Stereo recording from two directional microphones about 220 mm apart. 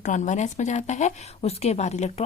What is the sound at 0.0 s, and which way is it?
A woman's voice, 35° left (ahead or behind).